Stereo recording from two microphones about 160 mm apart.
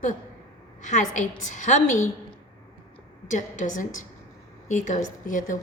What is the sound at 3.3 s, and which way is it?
A woman's voice, 50° left (ahead or behind).